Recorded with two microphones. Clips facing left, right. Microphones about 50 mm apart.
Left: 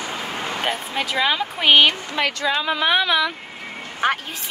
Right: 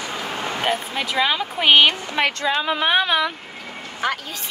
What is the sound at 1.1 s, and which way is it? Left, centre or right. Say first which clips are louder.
Speech: even; centre.